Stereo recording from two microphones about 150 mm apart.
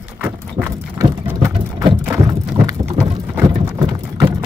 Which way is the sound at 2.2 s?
25° right (ahead or behind).